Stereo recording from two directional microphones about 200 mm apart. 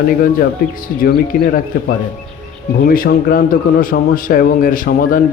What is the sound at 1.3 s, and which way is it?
Speech, 45° left (ahead or behind).